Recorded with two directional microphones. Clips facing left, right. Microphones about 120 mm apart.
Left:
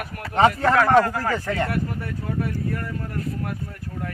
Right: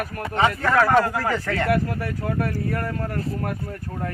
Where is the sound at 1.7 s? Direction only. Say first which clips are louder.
Right 5 dB; 90° right; by 3.1 s 65° right (ahead or behind).